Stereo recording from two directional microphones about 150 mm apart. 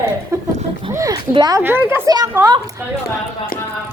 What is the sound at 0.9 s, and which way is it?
Speech, 20° right (ahead or behind).